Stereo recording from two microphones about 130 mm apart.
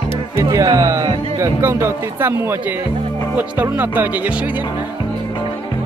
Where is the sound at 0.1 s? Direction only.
25° right (ahead or behind).